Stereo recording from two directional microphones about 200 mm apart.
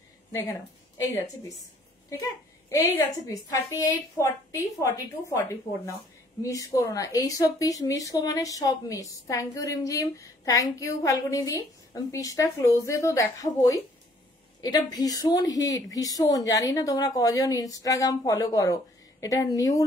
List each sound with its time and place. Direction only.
0.3 s speech: 15° left (ahead or behind)
3.3 s a woman's voice: 15° left (ahead or behind)